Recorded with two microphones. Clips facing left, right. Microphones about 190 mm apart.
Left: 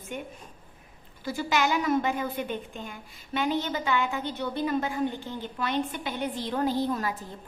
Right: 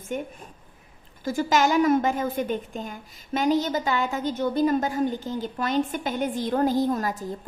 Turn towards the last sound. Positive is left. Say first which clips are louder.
# right 4 dB
turn(degrees=-45)  # may be behind; listen again after turning